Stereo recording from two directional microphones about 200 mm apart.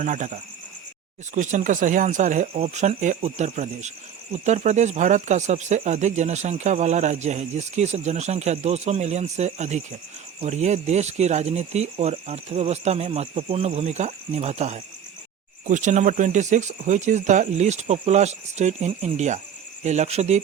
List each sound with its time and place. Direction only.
0.0 s speech: 40° right (ahead or behind)